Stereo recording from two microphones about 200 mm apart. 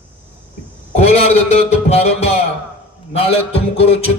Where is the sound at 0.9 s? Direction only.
35° left (ahead or behind).